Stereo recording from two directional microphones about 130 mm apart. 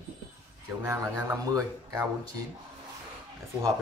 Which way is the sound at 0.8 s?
25° right (ahead or behind).